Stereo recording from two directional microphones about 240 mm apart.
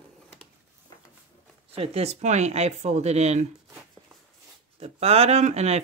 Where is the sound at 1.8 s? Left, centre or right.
Right.